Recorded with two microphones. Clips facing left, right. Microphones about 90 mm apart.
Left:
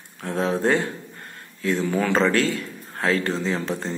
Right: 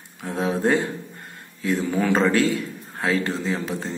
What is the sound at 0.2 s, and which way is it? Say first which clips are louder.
A man's voice: even; 10° right (ahead or behind).